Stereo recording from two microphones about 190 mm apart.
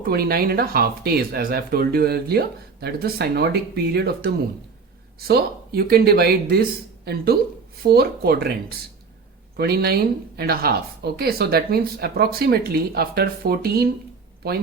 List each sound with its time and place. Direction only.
0.0 s speech: 55° right (ahead or behind)
9.6 s speech: 55° right (ahead or behind)